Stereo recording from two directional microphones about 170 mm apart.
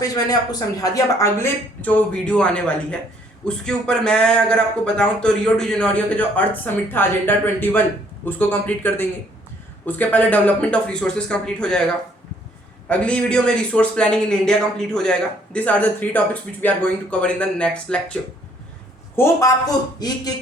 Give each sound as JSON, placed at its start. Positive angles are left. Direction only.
{"t": 0.8, "sound": "a man's voice", "side_deg": 20}
{"t": 12.9, "sound": "a man's voice", "side_deg": 5}
{"t": 19.1, "sound": "speech", "side_deg": 15}